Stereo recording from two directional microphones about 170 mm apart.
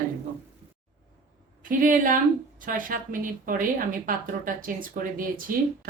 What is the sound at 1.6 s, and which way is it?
A woman's voice, 55° right (ahead or behind).